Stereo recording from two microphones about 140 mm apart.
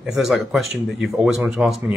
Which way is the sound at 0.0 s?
5° right (ahead or behind).